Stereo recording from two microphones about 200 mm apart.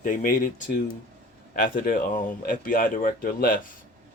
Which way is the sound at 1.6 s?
45° left (ahead or behind).